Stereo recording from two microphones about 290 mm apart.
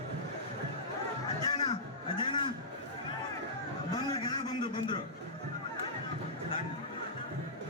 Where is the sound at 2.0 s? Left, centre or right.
Centre.